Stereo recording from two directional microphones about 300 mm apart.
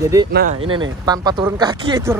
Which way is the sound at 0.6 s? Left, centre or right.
Centre.